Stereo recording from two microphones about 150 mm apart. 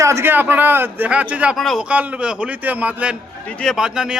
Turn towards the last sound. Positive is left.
turn(degrees=-5)  # may be behind; listen again after turning